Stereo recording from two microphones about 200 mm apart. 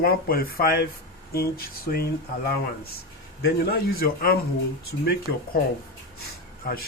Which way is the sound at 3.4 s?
50° left (ahead or behind).